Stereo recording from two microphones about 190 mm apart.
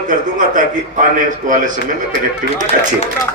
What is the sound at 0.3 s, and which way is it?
A man's voice, 45° right (ahead or behind).